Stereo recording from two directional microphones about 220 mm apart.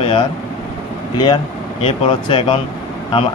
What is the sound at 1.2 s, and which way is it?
Speech, 25° left (ahead or behind).